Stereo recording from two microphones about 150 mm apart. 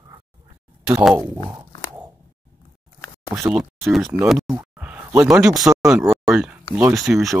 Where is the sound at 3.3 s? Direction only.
15° right (ahead or behind).